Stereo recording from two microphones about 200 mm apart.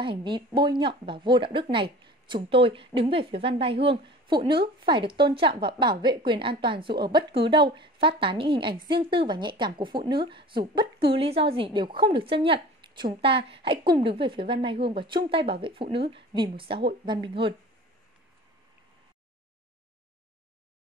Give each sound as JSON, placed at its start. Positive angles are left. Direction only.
{"t": 0.0, "sound": "speech", "side_deg": -25}